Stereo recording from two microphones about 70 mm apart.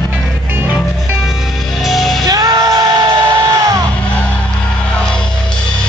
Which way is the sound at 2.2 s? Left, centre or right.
Right.